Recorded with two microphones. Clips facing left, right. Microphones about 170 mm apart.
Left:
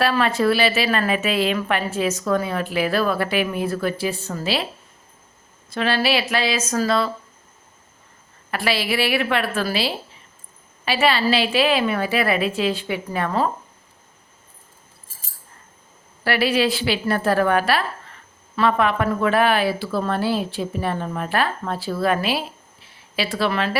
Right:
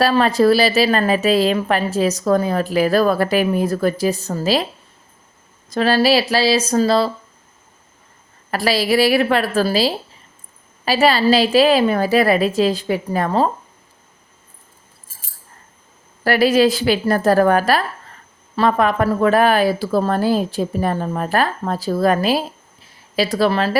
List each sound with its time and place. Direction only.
0.0 s a woman's voice: 35° right (ahead or behind)
5.7 s a woman's voice: 40° right (ahead or behind)
8.4 s a woman's voice: 40° right (ahead or behind)
16.2 s a woman's voice: 40° right (ahead or behind)